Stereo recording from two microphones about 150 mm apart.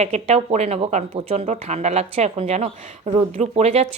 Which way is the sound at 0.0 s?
45° right (ahead or behind).